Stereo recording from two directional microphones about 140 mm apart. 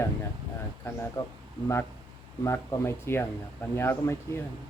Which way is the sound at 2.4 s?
20° left (ahead or behind).